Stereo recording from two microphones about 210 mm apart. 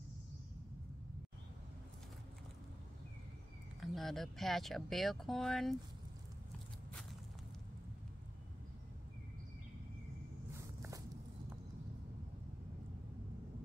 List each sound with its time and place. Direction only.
3.8 s speech: centre (ahead or behind)